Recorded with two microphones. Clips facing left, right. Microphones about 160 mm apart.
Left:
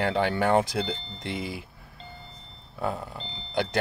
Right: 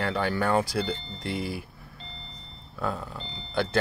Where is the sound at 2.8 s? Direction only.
15° left (ahead or behind).